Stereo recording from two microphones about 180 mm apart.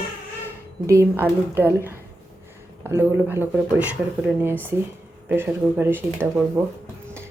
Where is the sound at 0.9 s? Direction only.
15° right (ahead or behind).